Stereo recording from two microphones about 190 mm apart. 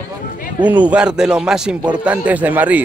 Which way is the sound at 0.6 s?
10° right (ahead or behind).